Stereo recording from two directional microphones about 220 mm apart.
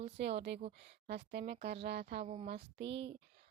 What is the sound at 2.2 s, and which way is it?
Speech, 25° right (ahead or behind).